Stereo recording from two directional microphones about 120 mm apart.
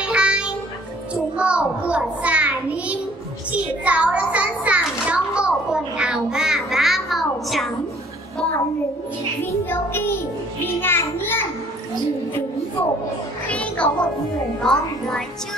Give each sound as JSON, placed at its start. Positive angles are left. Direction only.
{"t": 0.0, "sound": "music", "side_deg": -10}
{"t": 1.3, "sound": "child singing", "side_deg": -10}
{"t": 3.5, "sound": "a sound", "side_deg": -10}
{"t": 9.4, "sound": "music", "side_deg": 20}
{"t": 13.5, "sound": "music", "side_deg": 10}
{"t": 14.6, "sound": "a woman's voice", "side_deg": 5}